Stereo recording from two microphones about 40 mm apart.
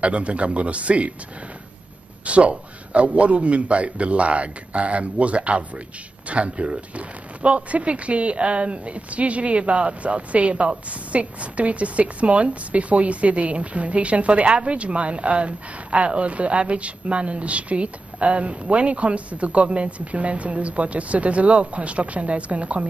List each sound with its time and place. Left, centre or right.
0.0 s speech: right
2.2 s speech: right